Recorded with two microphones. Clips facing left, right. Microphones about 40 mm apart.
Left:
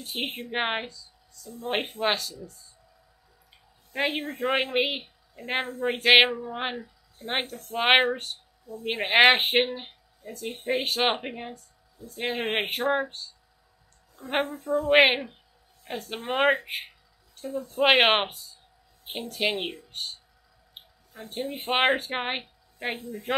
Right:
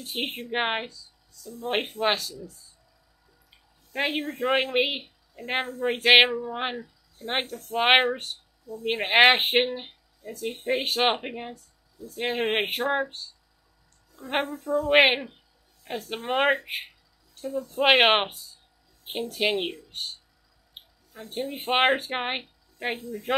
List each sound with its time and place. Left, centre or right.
0.0 s speech: centre
3.9 s speech: centre
14.4 s speech: centre
14.9 s a woman's voice: centre
21.3 s speech: centre
22.4 s a sound: centre
22.9 s speech: left